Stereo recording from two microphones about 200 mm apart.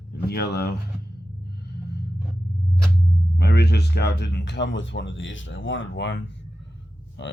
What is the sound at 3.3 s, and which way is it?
Speech, 55° left (ahead or behind).